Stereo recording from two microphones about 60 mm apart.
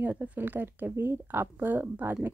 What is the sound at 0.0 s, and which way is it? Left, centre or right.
Speech, right.